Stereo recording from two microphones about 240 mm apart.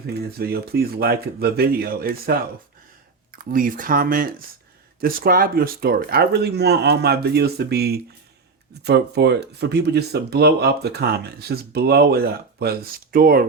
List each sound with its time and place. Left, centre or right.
0.3 s speech: right